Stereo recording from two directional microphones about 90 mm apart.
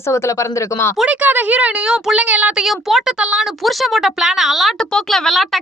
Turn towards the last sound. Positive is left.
turn(degrees=0)  # may be behind; listen again after turning